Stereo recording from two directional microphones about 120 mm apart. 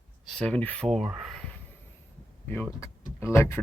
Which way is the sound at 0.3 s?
10° left (ahead or behind).